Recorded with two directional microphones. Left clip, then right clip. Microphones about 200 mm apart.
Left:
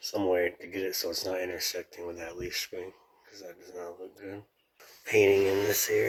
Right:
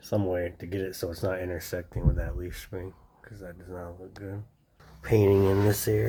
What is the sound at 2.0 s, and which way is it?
Speech, 25° left (ahead or behind).